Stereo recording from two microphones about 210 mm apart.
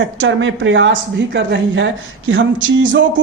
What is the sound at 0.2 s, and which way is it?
A man's voice, 65° right (ahead or behind).